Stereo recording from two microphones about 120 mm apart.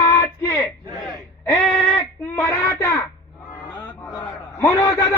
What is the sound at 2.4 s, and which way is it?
Child singing, 25° left (ahead or behind).